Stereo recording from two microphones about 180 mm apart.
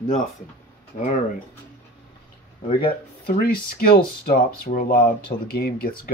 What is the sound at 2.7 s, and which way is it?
Speech, 55° left (ahead or behind).